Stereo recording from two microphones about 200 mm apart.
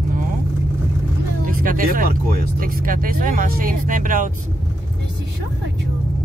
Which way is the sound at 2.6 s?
45° right (ahead or behind).